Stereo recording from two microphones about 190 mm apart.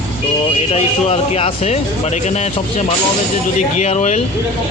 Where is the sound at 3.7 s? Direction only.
35° left (ahead or behind).